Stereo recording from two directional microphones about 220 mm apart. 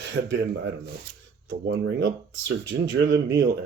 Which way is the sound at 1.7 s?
50° right (ahead or behind).